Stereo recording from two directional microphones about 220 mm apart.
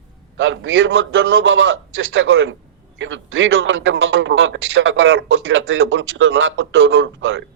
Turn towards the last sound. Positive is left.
turn(degrees=-60)  # may be behind; listen again after turning